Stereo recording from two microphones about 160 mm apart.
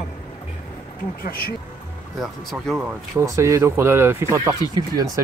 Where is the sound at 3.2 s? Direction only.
20° right (ahead or behind).